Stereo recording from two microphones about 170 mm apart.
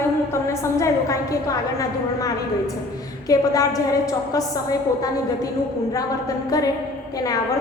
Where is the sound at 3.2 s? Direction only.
20° left (ahead or behind).